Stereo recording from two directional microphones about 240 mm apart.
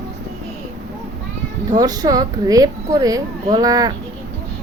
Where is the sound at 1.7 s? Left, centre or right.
Centre.